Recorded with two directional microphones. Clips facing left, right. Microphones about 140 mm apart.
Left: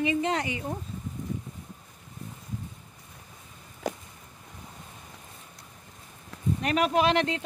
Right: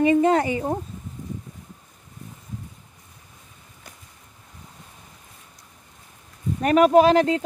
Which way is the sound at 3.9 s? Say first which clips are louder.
Left 18 dB; 90° left.